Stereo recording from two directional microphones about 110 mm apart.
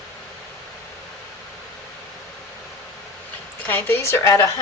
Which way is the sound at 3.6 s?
20° left (ahead or behind).